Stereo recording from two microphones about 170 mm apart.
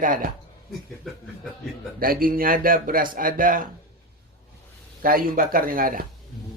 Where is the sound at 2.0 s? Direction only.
60° right (ahead or behind).